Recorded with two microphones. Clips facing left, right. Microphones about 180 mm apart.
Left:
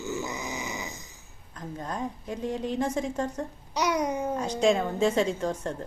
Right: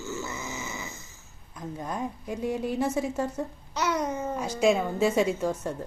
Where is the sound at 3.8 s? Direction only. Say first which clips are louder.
Left 1 dB; 15° left (ahead or behind).